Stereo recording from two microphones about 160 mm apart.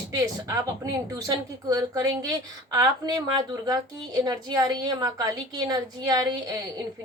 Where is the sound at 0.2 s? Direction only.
20° right (ahead or behind).